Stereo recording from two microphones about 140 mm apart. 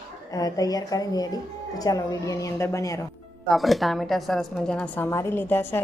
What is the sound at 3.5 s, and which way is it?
Speech, centre (ahead or behind).